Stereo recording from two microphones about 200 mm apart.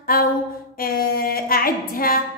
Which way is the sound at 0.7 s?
45° left (ahead or behind).